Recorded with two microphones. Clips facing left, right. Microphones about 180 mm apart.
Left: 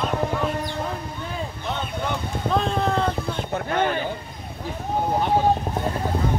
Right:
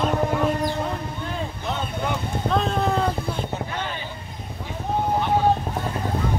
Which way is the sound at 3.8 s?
55° left (ahead or behind).